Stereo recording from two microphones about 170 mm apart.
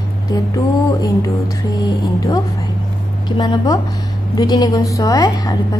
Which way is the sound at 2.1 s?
20° left (ahead or behind).